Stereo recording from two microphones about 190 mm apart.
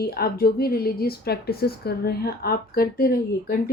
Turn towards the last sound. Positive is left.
turn(degrees=55)  # may be behind; listen again after turning